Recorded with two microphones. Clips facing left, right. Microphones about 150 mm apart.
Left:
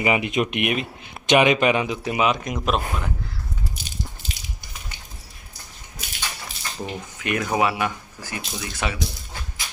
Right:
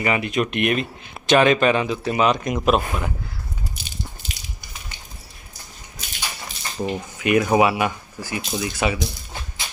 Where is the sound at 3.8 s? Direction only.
45° left (ahead or behind).